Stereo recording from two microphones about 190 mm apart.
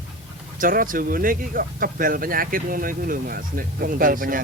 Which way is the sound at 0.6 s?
45° right (ahead or behind).